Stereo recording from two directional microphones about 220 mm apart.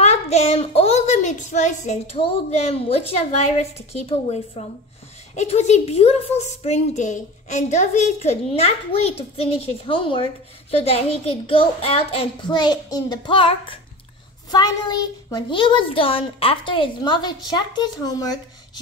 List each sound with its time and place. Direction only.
0.0 s a woman's voice: 30° left (ahead or behind)